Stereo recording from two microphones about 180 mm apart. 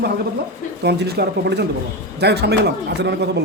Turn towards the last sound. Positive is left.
turn(degrees=-70)  # may be behind; listen again after turning